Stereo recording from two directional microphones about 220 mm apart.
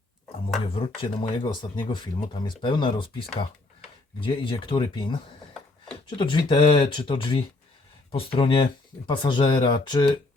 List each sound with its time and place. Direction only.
0.7 s speech: 25° left (ahead or behind)